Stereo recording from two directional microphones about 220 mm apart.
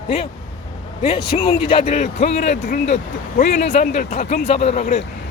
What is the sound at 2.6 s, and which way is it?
Speech, 45° left (ahead or behind).